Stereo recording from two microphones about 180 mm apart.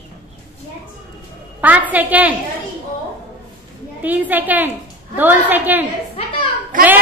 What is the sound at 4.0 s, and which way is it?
A woman's voice, 10° right (ahead or behind).